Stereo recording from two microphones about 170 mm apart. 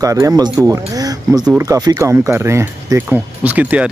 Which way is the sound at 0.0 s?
20° right (ahead or behind).